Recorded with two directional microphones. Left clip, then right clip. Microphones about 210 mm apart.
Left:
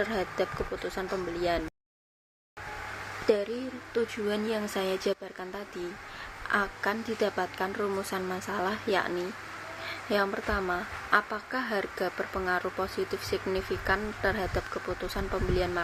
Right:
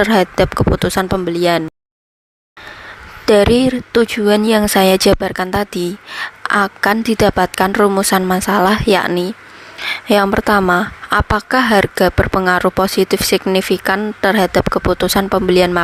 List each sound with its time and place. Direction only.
0.0 s speech: 50° right (ahead or behind)
3.2 s speech: 55° right (ahead or behind)